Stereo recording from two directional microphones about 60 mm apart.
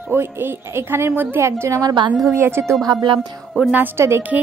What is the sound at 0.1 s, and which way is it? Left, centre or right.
A woman's voice, right.